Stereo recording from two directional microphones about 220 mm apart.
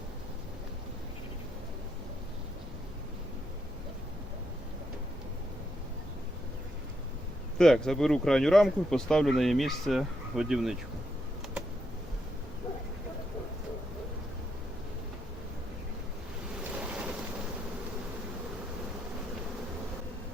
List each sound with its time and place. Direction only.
7.6 s speech: centre (ahead or behind)
16.7 s boat: 5° right (ahead or behind)